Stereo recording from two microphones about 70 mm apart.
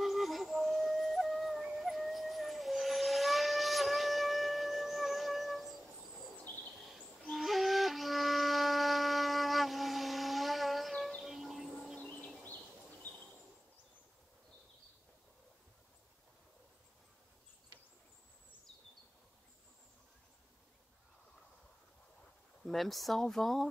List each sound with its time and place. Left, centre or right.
0.0 s flute: centre
1.6 s howl: centre
6.4 s owl: left
6.9 s wind instrument: centre
11.2 s music: centre
12.0 s a sound: left
22.7 s speech: centre